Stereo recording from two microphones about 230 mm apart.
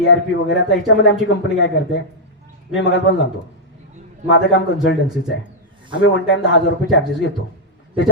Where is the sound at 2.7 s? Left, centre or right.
Left.